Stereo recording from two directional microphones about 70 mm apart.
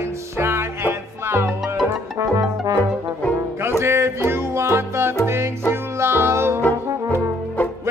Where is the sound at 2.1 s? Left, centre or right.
Right.